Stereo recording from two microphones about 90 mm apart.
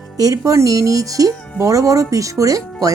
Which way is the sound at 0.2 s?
40° right (ahead or behind).